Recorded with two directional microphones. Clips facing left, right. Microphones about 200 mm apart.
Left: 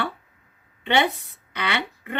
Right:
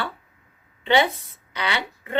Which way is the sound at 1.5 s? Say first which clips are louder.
Even; 60° left (ahead or behind).